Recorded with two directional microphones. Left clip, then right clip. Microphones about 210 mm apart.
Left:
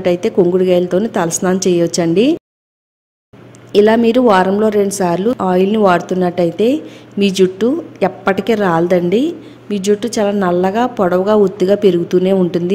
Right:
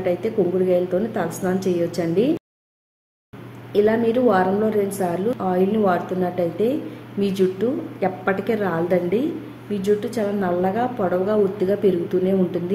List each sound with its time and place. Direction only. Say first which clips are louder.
0.0 s a woman's voice: left 8 dB; 50° left (ahead or behind)
3.7 s a woman's voice: left 8 dB; 50° left (ahead or behind)